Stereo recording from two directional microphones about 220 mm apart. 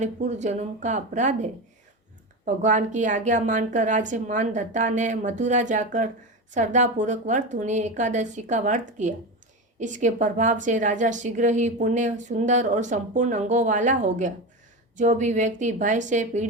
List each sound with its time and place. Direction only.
0.0 s a woman's voice: 30° right (ahead or behind)